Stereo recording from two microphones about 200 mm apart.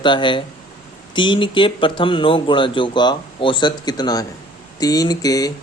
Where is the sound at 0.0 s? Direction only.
25° left (ahead or behind).